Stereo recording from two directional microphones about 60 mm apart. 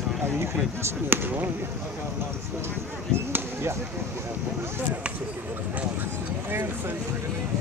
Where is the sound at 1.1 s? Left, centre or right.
Right.